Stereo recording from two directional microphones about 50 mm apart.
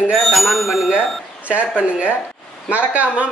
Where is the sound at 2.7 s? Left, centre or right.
Right.